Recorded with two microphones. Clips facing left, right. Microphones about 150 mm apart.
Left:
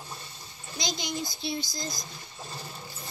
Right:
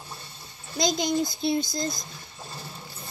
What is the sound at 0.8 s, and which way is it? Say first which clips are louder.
A child's voice: right 9 dB; 50° right (ahead or behind).